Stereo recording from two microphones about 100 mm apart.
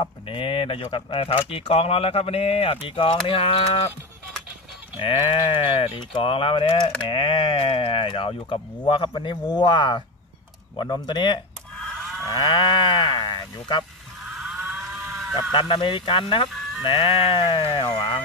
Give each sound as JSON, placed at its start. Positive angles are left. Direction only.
{"t": 0.0, "sound": "speech", "side_deg": 60}
{"t": 1.5, "sound": "speech", "side_deg": 75}
{"t": 4.9, "sound": "speech", "side_deg": 55}
{"t": 10.8, "sound": "sheep", "side_deg": 50}
{"t": 12.3, "sound": "livestock", "side_deg": 45}
{"t": 14.2, "sound": "moo", "side_deg": -5}
{"t": 15.5, "sound": "speech", "side_deg": 55}
{"t": 16.4, "sound": "ice cream truck", "side_deg": 0}
{"t": 16.8, "sound": "sheep", "side_deg": 60}